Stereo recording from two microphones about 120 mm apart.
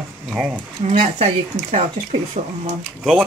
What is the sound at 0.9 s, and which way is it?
Speech, 60° right (ahead or behind).